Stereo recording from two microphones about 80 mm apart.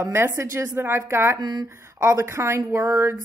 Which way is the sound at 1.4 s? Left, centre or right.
Right.